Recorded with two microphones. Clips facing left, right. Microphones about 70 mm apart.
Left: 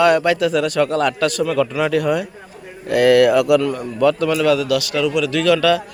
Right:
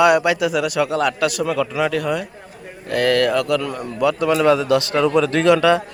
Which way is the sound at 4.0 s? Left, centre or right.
Centre.